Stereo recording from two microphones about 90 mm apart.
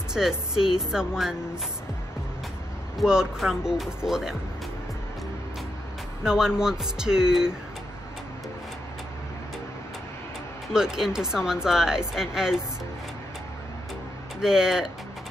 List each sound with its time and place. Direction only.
0.1 s speech: 5° right (ahead or behind)
3.0 s speech: 5° right (ahead or behind)
6.2 s speech: 5° right (ahead or behind)
10.7 s speech: 5° right (ahead or behind)
14.4 s speech: 5° right (ahead or behind)